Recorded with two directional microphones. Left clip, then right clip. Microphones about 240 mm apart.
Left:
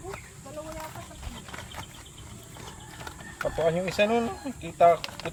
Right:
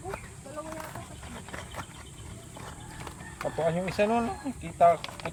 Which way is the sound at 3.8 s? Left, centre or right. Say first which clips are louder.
Left 2 dB; left.